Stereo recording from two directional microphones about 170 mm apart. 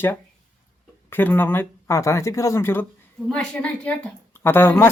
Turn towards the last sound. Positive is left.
turn(degrees=10)  # may be behind; listen again after turning